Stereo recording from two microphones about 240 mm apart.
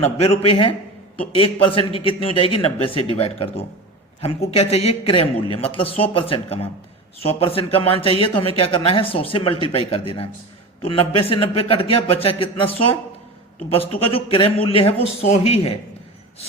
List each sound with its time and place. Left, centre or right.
0.0 s a man's voice: left